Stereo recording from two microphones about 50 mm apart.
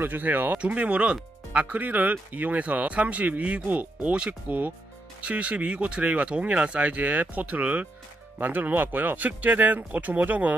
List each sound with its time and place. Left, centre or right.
0.0 s speech: right
0.5 s speech: right